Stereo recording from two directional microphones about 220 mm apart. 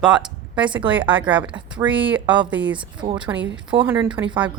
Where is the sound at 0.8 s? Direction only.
5° right (ahead or behind).